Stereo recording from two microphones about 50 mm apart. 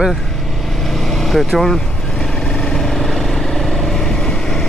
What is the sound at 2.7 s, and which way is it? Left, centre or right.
Vehicle, centre.